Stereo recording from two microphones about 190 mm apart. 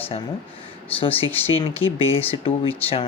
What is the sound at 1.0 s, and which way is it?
A man's voice, 30° left (ahead or behind).